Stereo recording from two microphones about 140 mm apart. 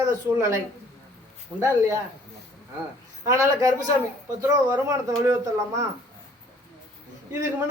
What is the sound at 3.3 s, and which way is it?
A woman's voice, 20° right (ahead or behind).